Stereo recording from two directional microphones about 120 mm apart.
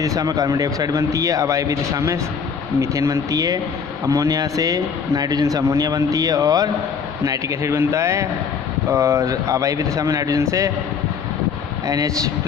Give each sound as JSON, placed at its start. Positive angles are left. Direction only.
{"t": 0.0, "sound": "speech", "side_deg": -30}
{"t": 11.9, "sound": "speech", "side_deg": -30}